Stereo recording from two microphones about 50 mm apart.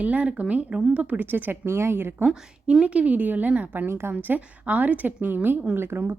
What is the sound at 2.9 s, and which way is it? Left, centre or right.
Speech, right.